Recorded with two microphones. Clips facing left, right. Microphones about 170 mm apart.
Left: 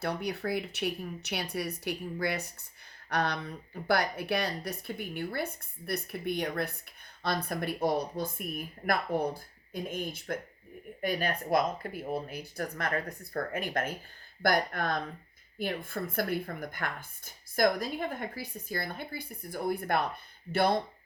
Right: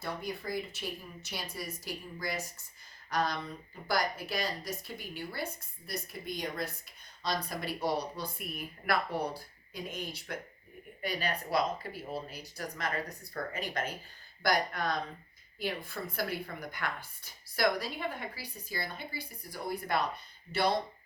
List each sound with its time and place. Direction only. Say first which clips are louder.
0.0 s a woman's voice: left 5 dB; 70° left (ahead or behind); by 20.7 s 50° left (ahead or behind)